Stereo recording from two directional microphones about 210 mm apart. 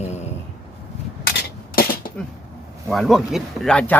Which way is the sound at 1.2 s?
45° left (ahead or behind).